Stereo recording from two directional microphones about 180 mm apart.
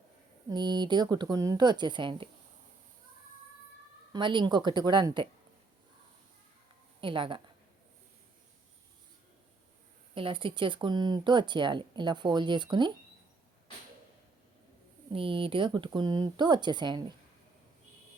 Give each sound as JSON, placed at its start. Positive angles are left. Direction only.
{"t": 0.5, "sound": "speech", "side_deg": -25}
{"t": 4.1, "sound": "speech", "side_deg": -25}
{"t": 7.0, "sound": "speech", "side_deg": -30}
{"t": 10.2, "sound": "speech", "side_deg": -30}
{"t": 15.1, "sound": "speech", "side_deg": -30}